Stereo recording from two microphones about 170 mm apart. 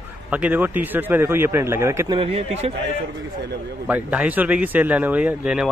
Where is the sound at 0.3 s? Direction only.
10° right (ahead or behind).